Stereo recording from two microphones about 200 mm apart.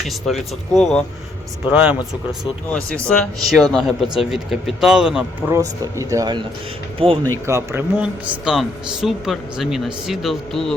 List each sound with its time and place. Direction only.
0.0 s speech: centre (ahead or behind)
2.6 s speech: 5° left (ahead or behind)
5.5 s speech: 15° right (ahead or behind)
7.4 s speech: 15° right (ahead or behind)